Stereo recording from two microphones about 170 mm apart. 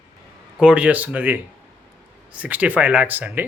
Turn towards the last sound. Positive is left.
turn(degrees=-10)  # may be behind; listen again after turning